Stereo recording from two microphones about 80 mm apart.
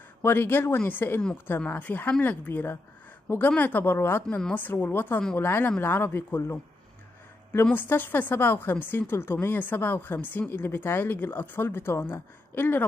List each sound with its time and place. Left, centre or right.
0.2 s speech: left
7.7 s speech: left